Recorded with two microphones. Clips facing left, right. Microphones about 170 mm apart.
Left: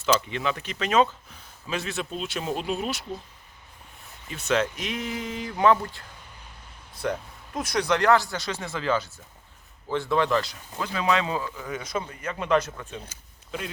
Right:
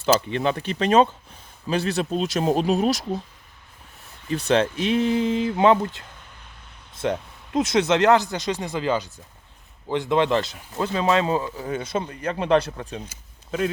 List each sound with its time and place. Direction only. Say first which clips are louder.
0.0 s speech: right 4 dB; 35° right (ahead or behind)
4.3 s speech: right 5 dB; 35° right (ahead or behind)